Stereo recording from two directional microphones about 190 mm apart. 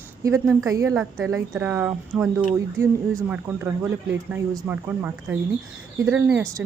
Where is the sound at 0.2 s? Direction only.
15° right (ahead or behind).